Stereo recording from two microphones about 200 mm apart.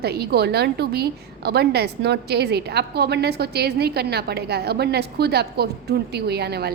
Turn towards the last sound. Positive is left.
turn(degrees=-55)  # may be behind; listen again after turning